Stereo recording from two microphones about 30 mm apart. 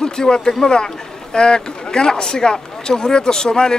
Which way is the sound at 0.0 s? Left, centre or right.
Left.